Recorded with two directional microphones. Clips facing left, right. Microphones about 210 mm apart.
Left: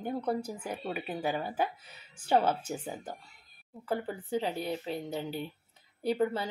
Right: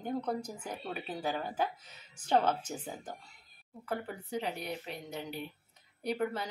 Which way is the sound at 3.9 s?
30° left (ahead or behind).